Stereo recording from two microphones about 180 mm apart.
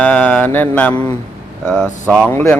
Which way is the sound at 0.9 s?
35° right (ahead or behind).